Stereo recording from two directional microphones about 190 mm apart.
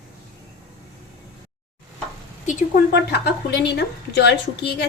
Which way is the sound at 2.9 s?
60° left (ahead or behind).